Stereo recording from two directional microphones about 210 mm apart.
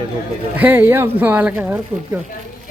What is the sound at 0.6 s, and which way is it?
A man's voice, 10° right (ahead or behind).